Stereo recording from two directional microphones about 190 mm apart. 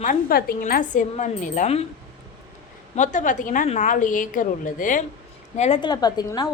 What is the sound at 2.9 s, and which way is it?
A woman's voice, 40° left (ahead or behind).